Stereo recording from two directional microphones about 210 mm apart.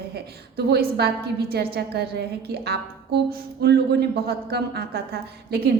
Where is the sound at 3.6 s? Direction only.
50° right (ahead or behind).